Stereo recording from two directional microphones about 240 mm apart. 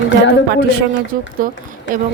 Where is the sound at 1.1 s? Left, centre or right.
Right.